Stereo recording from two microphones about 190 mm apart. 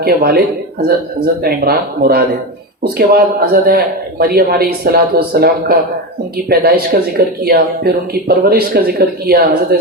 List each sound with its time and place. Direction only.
0.0 s speech: 55° right (ahead or behind)